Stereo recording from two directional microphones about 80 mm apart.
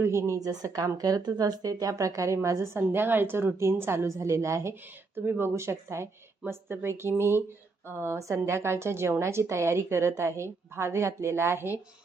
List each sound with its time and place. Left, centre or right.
0.0 s a woman's voice: right
2.7 s a woman's voice: right